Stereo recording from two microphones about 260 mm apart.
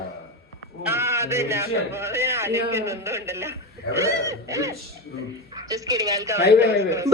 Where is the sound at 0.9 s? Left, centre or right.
Centre.